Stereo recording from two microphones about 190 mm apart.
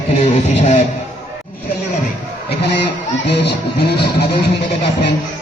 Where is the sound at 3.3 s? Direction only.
60° left (ahead or behind).